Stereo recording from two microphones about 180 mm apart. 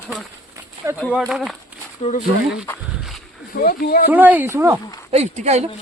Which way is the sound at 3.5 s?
55° left (ahead or behind).